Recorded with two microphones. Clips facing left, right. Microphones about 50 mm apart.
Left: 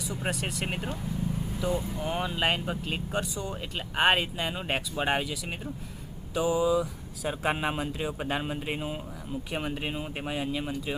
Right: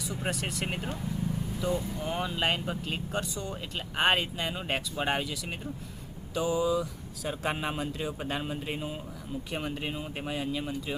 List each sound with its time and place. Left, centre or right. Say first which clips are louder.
0.2 s speech: left 1 dB; centre